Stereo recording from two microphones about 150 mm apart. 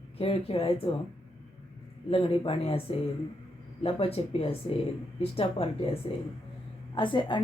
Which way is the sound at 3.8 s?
40° left (ahead or behind).